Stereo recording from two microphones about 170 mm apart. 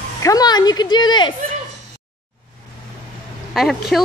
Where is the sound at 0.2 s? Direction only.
20° left (ahead or behind).